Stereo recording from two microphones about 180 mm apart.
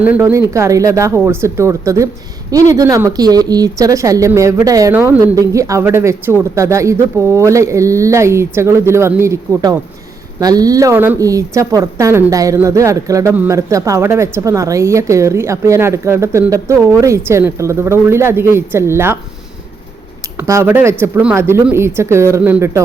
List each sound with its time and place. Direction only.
0.0 s a woman's voice: 10° right (ahead or behind)
20.3 s a woman's voice: 15° right (ahead or behind)